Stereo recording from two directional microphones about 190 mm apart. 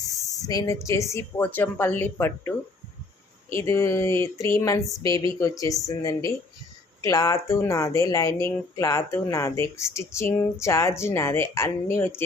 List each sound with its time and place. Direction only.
0.4 s speech: 20° left (ahead or behind)
3.5 s speech: 15° left (ahead or behind)